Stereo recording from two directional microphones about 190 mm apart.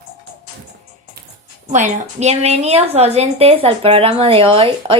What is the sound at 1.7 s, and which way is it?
A woman's voice, 35° right (ahead or behind).